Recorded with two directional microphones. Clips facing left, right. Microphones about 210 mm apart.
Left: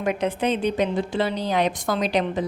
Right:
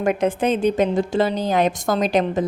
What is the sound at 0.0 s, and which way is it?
A woman's voice, 50° right (ahead or behind).